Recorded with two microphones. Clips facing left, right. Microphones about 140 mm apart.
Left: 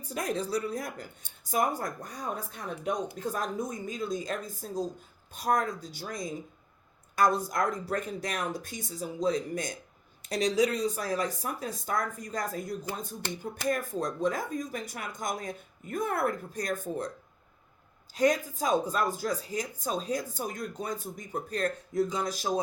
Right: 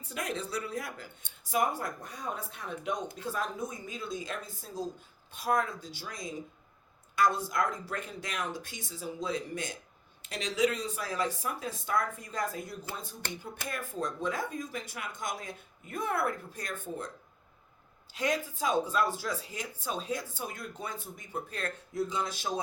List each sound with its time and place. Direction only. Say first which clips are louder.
0.1 s speech: left 5 dB; 35° left (ahead or behind)
18.1 s speech: left 6 dB; 40° left (ahead or behind)